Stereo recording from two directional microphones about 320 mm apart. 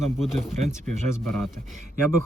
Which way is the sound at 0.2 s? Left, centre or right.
Centre.